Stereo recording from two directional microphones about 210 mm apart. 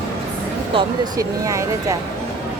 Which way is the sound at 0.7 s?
20° right (ahead or behind).